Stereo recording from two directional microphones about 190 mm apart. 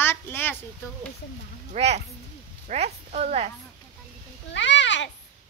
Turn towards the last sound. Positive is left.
turn(degrees=70)  # may be behind; listen again after turning